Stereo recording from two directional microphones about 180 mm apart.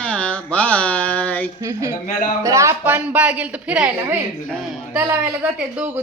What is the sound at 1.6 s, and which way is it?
A man's voice, 15° right (ahead or behind).